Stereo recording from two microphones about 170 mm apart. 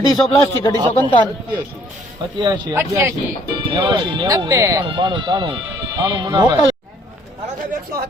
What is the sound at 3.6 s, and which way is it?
Speech, 30° right (ahead or behind).